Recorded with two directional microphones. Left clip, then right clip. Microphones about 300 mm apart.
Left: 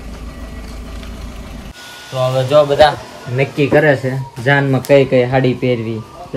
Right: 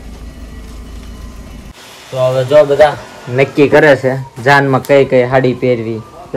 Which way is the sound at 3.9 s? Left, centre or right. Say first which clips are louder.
Right 7 dB; centre.